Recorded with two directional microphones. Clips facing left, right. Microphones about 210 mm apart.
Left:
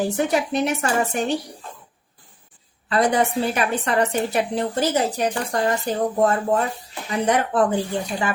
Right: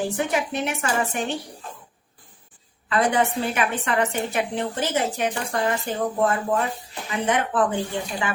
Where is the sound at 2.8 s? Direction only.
35° left (ahead or behind).